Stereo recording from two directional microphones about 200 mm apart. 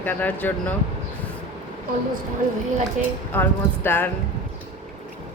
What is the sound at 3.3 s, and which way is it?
Speech, 10° left (ahead or behind).